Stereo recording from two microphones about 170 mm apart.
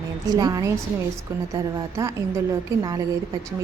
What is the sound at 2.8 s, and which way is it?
Speech, 20° right (ahead or behind).